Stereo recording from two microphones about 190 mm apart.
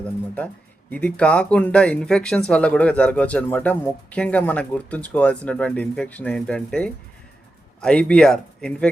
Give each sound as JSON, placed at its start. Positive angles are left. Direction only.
{"t": 0.0, "sound": "speech", "side_deg": 5}